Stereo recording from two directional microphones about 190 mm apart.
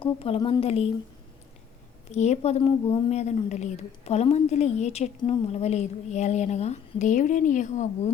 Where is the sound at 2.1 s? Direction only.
35° left (ahead or behind).